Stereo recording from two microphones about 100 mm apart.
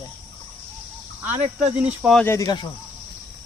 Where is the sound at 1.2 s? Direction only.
15° right (ahead or behind).